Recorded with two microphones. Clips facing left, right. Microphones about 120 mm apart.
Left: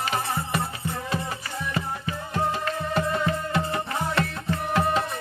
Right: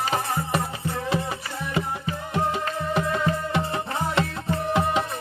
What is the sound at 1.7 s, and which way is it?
Music, 20° right (ahead or behind).